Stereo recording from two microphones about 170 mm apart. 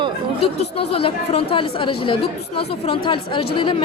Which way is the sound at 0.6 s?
35° left (ahead or behind).